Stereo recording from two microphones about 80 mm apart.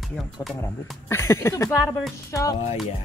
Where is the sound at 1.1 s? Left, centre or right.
Left.